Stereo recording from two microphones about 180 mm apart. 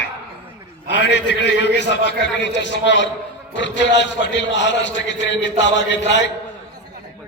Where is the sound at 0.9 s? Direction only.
75° left (ahead or behind).